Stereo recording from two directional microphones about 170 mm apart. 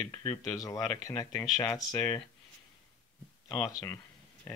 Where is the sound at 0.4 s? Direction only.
20° left (ahead or behind).